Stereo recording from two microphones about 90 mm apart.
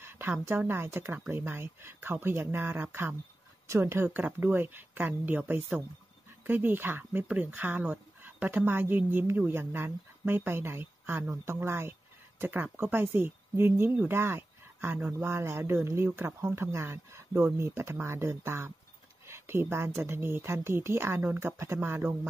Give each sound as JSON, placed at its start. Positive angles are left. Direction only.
{"t": 0.0, "sound": "speech", "side_deg": -25}